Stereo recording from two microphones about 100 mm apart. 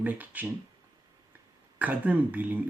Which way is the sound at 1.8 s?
15° right (ahead or behind).